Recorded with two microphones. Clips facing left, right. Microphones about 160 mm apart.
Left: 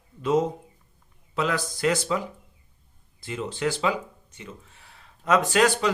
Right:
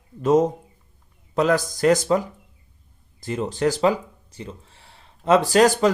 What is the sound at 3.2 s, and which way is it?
Speech, 40° right (ahead or behind).